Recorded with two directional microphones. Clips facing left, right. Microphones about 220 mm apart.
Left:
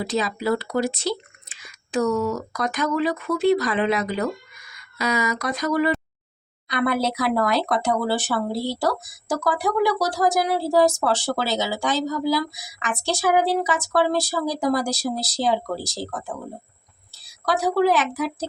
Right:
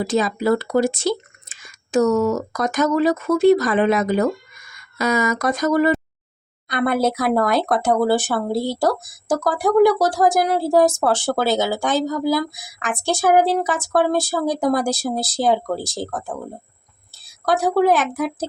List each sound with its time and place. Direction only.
0.0 s a woman's voice: 50° right (ahead or behind)